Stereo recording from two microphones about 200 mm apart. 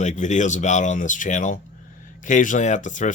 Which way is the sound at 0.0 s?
35° left (ahead or behind).